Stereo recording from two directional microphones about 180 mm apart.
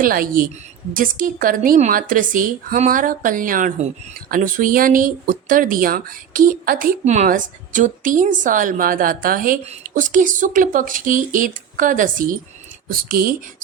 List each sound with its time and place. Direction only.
0.0 s speech: 50° right (ahead or behind)